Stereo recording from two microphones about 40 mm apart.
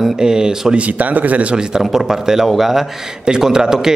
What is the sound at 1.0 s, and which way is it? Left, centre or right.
Speech, right.